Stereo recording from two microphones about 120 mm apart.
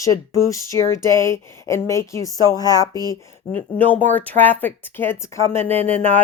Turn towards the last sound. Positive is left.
turn(degrees=15)  # may be behind; listen again after turning